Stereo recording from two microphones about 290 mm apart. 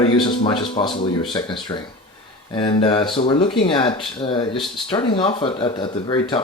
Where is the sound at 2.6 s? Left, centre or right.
Centre.